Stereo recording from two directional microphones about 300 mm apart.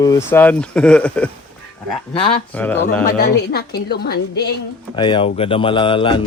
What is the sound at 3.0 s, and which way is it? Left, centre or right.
A woman's voice, left.